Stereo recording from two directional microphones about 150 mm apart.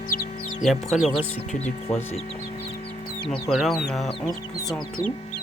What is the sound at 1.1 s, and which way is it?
Speech, 40° left (ahead or behind).